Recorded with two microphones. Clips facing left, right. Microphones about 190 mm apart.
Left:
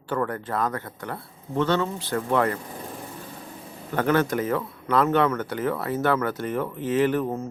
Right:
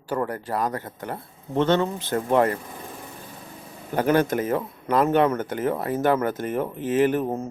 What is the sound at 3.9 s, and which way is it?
Speech, 15° right (ahead or behind).